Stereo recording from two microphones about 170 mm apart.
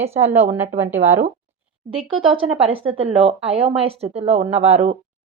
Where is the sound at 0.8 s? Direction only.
15° right (ahead or behind).